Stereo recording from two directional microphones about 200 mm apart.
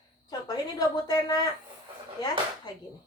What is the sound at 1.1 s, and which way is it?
Speech, 20° left (ahead or behind).